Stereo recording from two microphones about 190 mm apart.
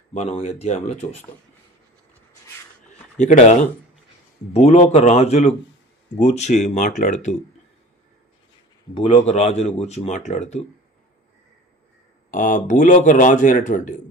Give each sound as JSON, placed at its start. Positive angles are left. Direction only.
{"t": 0.1, "sound": "speech", "side_deg": 35}
{"t": 2.8, "sound": "a sound", "side_deg": 40}
{"t": 4.5, "sound": "speech", "side_deg": 35}
{"t": 8.9, "sound": "speech", "side_deg": 35}
{"t": 12.3, "sound": "speech", "side_deg": 45}